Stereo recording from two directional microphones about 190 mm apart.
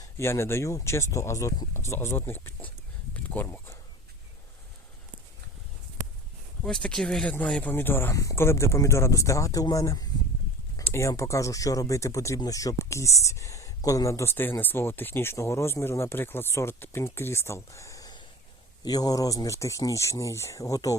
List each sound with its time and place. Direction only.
0.0 s speech: 15° left (ahead or behind)
6.6 s speech: 5° left (ahead or behind)